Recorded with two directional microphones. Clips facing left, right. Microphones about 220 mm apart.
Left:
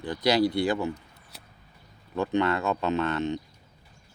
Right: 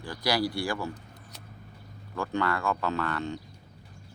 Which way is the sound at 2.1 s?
20° left (ahead or behind).